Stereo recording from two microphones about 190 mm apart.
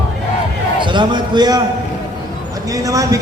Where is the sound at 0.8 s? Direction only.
25° right (ahead or behind).